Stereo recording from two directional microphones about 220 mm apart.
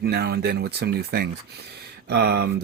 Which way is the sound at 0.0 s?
45° right (ahead or behind).